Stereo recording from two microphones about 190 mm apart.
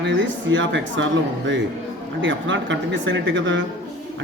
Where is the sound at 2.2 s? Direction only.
75° right (ahead or behind).